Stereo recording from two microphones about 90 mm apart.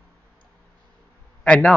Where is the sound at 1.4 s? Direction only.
15° left (ahead or behind).